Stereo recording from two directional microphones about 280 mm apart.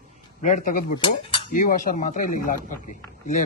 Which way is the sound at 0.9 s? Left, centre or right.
Centre.